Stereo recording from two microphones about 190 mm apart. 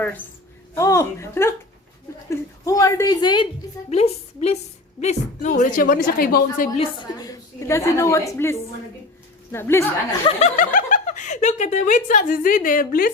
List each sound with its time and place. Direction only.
0.7 s a woman's voice: 15° left (ahead or behind); by 6.7 s 50° left (ahead or behind)
6.7 s a woman's voice: 20° left (ahead or behind)
10.2 s speech: 40° left (ahead or behind)